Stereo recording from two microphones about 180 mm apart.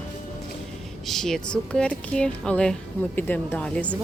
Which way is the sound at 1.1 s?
Centre (ahead or behind).